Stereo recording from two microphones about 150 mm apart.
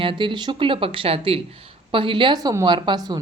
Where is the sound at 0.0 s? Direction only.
35° right (ahead or behind).